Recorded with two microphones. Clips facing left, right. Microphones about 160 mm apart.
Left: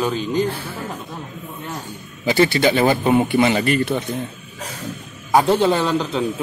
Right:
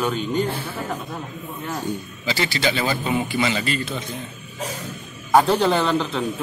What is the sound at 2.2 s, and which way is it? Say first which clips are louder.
A man's voice: left 8 dB; 55° left (ahead or behind).